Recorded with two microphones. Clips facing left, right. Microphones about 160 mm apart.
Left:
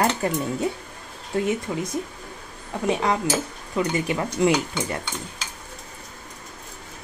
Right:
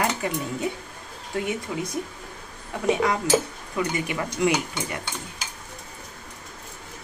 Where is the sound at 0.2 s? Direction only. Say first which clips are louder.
Left 3 dB; 35° left (ahead or behind).